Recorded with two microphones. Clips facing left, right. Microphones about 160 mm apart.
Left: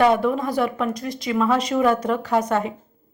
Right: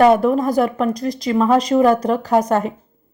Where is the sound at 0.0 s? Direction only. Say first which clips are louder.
Right 5 dB; 40° right (ahead or behind).